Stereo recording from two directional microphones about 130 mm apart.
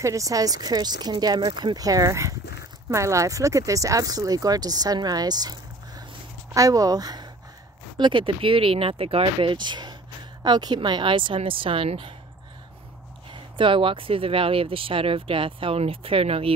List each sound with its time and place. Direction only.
0.0 s speech: 25° right (ahead or behind)
8.0 s speech: 40° right (ahead or behind)
13.3 s speech: 40° right (ahead or behind)